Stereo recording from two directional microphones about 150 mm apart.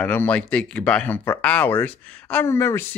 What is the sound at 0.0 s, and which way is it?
Speech, 10° left (ahead or behind).